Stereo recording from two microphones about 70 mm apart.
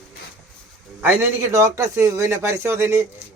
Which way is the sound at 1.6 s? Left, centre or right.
Right.